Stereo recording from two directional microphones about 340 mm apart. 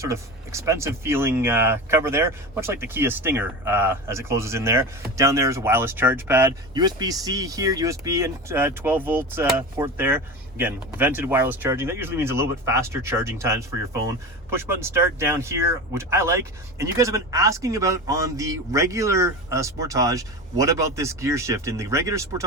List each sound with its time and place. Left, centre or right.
0.0 s speech: centre